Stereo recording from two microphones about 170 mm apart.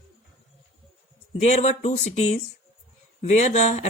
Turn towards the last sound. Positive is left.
turn(degrees=40)  # may be behind; listen again after turning